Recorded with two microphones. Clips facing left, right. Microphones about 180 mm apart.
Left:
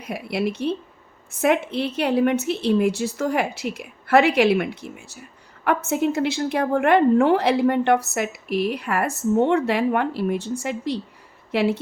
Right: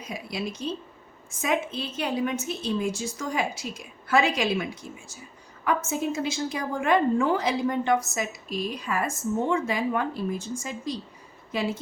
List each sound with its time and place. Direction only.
0.0 s a woman's voice: 60° left (ahead or behind)